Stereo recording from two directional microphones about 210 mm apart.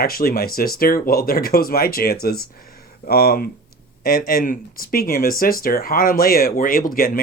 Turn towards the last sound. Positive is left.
turn(degrees=40)  # may be behind; listen again after turning